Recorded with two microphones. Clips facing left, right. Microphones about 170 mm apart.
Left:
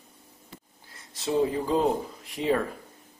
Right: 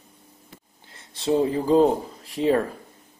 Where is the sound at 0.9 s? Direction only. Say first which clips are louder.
Right 4 dB; 30° right (ahead or behind).